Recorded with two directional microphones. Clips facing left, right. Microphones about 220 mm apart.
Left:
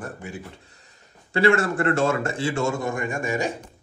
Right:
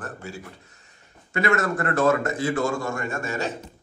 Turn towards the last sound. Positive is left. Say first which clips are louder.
# left 3 dB
turn(degrees=15)  # may be behind; listen again after turning